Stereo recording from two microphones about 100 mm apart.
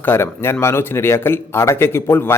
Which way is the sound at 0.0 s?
25° left (ahead or behind).